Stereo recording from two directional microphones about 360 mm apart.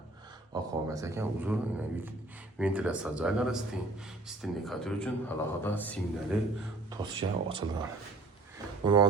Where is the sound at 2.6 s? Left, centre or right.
Centre.